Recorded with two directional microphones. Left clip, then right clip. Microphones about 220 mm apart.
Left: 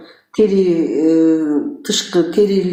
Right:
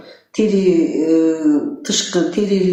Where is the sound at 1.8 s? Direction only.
40° left (ahead or behind).